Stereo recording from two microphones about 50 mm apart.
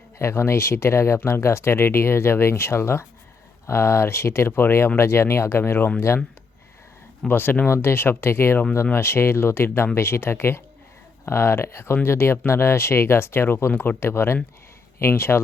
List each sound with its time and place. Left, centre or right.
0.2 s speech: left
7.3 s speech: left
7.7 s speech: left